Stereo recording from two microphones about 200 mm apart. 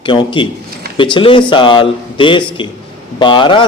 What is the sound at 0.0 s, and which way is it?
Speech, 25° left (ahead or behind).